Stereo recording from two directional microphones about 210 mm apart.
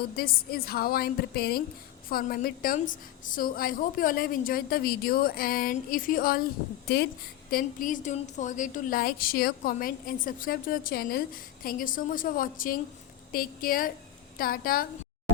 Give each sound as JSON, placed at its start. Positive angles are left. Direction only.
{"t": 0.2, "sound": "a woman's voice", "side_deg": 45}